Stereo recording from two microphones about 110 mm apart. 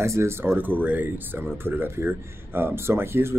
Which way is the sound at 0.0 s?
25° right (ahead or behind).